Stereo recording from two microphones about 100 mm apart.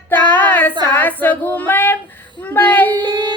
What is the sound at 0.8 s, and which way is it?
Child singing, 20° left (ahead or behind).